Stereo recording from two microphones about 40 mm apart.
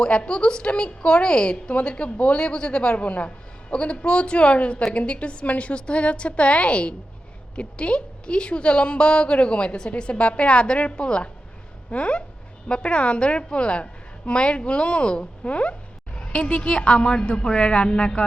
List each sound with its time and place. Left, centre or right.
0.0 s a woman's voice: left
16.1 s a sound: left
16.6 s a woman's voice: left